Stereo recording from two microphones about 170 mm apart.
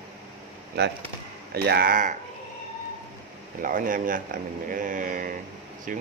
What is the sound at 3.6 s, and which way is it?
Speech, 55° right (ahead or behind).